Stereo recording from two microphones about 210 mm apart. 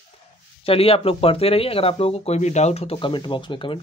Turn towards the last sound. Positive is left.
turn(degrees=25)  # may be behind; listen again after turning